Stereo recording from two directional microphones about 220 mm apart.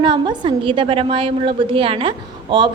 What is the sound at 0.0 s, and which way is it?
A woman's voice, 20° right (ahead or behind).